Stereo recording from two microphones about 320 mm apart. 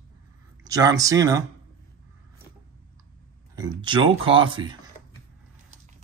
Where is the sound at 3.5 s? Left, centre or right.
Centre.